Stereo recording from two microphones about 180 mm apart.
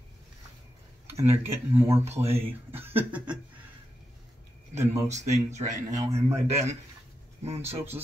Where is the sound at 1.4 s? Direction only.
15° right (ahead or behind).